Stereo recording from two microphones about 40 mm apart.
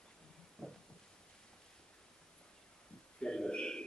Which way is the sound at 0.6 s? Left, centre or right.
Centre.